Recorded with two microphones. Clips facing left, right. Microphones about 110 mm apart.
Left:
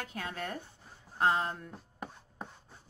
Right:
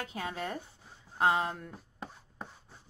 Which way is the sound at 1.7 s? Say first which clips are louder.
Left 1 dB; 5° left (ahead or behind).